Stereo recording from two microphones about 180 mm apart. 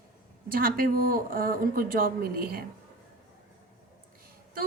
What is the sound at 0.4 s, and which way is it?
Speech, 55° right (ahead or behind).